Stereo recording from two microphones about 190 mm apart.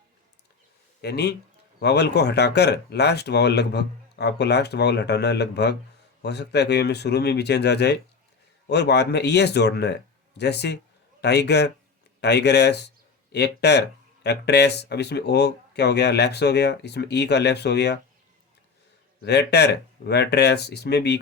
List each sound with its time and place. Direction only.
1.0 s speech: 60° left (ahead or behind)
19.2 s speech: 60° left (ahead or behind)